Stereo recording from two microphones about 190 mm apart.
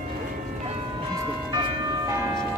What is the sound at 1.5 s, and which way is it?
Church bell, 20° right (ahead or behind).